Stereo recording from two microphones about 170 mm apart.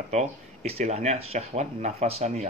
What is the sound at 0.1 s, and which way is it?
Speech, 40° right (ahead or behind).